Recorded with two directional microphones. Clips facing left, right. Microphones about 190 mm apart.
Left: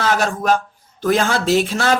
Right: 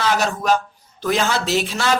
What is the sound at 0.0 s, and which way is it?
Speech, 45° left (ahead or behind).